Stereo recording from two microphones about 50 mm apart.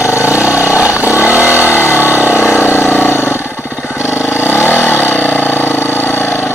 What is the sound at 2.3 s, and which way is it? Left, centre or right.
Vehicle, left.